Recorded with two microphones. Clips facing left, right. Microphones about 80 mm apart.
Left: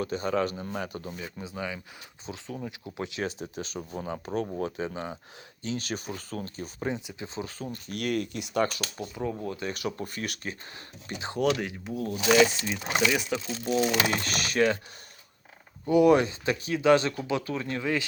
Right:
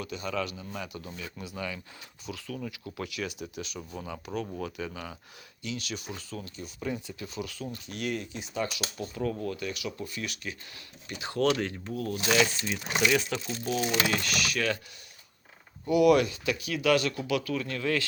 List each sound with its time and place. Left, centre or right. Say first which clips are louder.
0.0 s speech: left 6 dB; left
1.4 s speech: left 1 dB; centre; by 6.8 s left
6.8 s speech: left 2 dB; left
7.3 s speech: left 1 dB; left
7.9 s speech: left 4 dB; left
9.1 s speech: right 1 dB; left
9.7 s speech: left 3 dB; left
11.3 s speech: even; centre
14.0 s speech: left 1 dB; left
15.9 s speech: left 2 dB; left